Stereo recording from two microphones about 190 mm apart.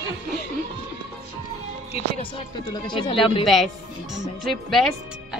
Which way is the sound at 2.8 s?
25° left (ahead or behind).